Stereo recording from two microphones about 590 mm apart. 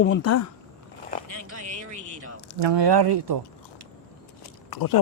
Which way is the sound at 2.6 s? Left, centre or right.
Right.